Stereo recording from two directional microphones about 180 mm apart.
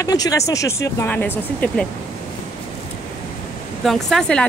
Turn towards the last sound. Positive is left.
turn(degrees=5)  # may be behind; listen again after turning